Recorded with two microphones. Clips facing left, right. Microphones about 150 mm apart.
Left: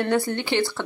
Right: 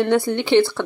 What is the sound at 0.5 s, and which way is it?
Speech, 10° left (ahead or behind).